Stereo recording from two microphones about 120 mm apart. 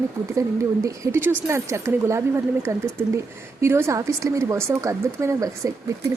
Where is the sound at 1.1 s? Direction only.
20° right (ahead or behind).